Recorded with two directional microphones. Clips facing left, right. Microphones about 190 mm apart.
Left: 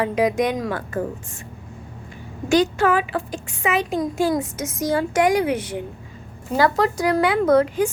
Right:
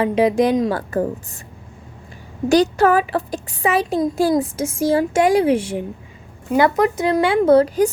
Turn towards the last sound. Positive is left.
turn(degrees=-35)  # may be behind; listen again after turning